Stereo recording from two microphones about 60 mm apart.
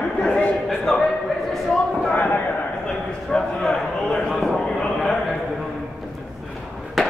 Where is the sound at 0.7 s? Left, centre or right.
Centre.